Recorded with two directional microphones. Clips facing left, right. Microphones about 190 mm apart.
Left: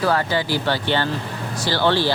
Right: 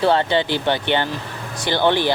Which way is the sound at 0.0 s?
25° right (ahead or behind).